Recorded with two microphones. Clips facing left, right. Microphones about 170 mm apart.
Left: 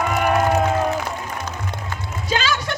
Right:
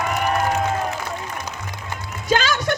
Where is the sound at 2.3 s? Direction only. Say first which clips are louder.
Right 3 dB; 45° right (ahead or behind).